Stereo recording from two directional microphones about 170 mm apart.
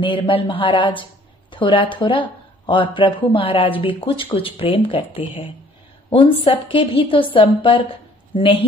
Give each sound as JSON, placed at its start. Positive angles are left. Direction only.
{"t": 0.0, "sound": "a woman's voice", "side_deg": 30}